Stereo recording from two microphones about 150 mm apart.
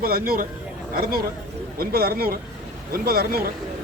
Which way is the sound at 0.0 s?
80° right.